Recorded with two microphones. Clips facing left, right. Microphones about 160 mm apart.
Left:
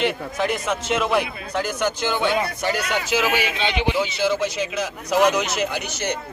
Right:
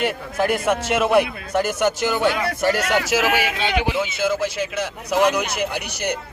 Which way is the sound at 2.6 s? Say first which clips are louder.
Right 4 dB; 75° right (ahead or behind).